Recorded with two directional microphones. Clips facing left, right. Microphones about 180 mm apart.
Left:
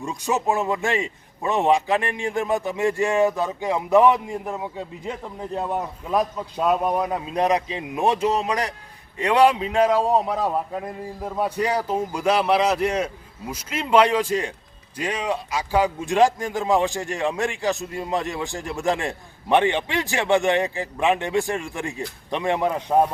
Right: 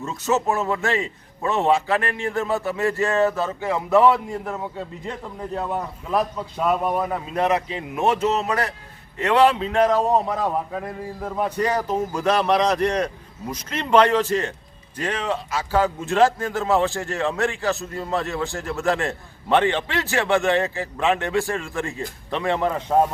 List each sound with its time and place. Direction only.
0.0 s speech: 15° left (ahead or behind)
6.8 s speech: 15° left (ahead or behind)